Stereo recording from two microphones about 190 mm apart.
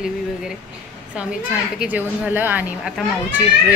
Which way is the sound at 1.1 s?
5° right (ahead or behind).